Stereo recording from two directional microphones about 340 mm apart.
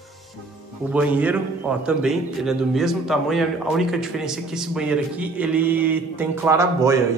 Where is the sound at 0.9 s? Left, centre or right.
Centre.